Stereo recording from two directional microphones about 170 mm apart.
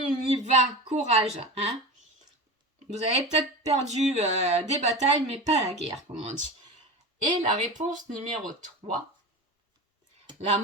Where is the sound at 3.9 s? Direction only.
40° right (ahead or behind).